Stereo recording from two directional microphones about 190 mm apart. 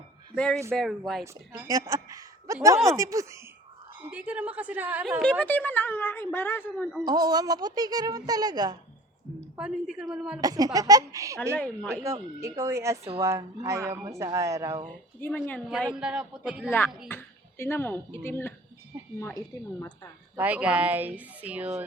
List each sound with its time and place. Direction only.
0.3 s a man's voice: 5° left (ahead or behind)
1.2 s a woman's voice: 15° right (ahead or behind)
5.2 s a woman's voice: 5° left (ahead or behind)
7.0 s a woman's voice: 20° right (ahead or behind)
9.6 s a man's voice: 5° right (ahead or behind)
10.4 s a woman's voice: 20° right (ahead or behind)
11.5 s a woman's voice: 5° left (ahead or behind)
12.0 s a woman's voice: 15° right (ahead or behind)
15.7 s a man's voice: 5° right (ahead or behind)
17.1 s speech: 10° left (ahead or behind)
18.9 s a sound: 15° right (ahead or behind)
19.5 s a woman's voice: 15° left (ahead or behind)
20.4 s a woman's voice: 5° right (ahead or behind)